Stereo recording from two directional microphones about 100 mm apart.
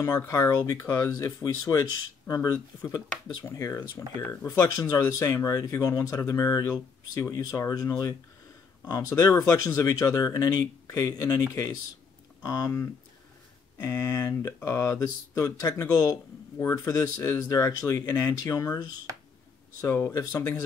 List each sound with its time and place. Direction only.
0.0 s speech: 30° left (ahead or behind)
12.4 s speech: 35° left (ahead or behind)